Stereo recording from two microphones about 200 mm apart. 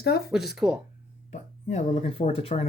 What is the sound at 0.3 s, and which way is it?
Speech, centre (ahead or behind).